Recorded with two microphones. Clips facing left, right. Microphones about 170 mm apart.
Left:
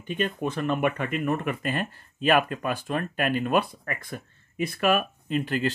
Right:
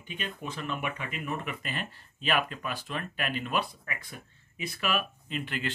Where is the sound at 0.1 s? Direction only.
50° left (ahead or behind).